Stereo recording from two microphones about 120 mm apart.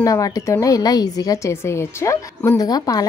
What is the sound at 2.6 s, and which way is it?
Speech, 35° left (ahead or behind).